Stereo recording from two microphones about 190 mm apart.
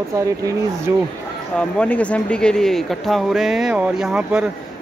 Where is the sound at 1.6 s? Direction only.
5° left (ahead or behind).